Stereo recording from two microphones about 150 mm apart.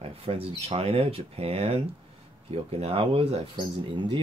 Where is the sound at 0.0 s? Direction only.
40° right (ahead or behind).